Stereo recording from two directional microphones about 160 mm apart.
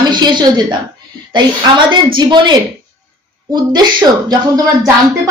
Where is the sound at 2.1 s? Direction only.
30° right (ahead or behind).